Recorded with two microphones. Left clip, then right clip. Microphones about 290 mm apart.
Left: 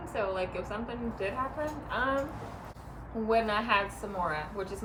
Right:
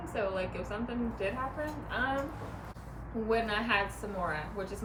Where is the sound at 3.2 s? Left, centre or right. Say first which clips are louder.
Left 3 dB; centre.